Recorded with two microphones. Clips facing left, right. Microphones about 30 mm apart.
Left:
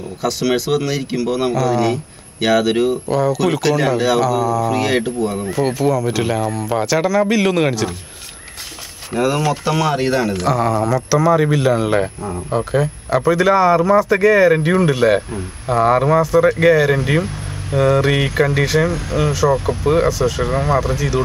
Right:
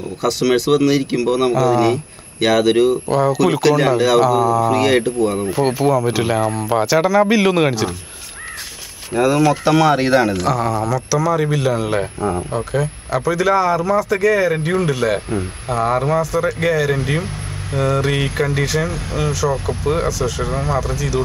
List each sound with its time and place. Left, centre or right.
0.2 s speech: centre
3.1 s speech: centre
9.1 s speech: centre
10.3 s speech: centre